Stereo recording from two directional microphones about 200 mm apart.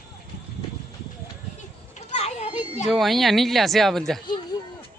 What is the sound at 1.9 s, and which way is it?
Children playing, 35° left (ahead or behind).